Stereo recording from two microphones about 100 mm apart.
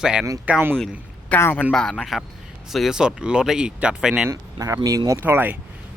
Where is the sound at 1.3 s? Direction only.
20° left (ahead or behind).